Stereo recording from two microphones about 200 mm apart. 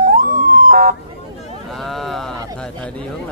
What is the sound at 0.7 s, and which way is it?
Emergency vehicle, 45° right (ahead or behind).